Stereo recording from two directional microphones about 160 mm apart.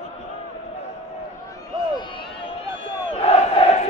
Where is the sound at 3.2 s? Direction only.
40° left (ahead or behind).